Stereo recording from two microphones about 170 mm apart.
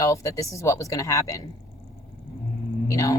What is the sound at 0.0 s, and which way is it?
Speech, 20° left (ahead or behind).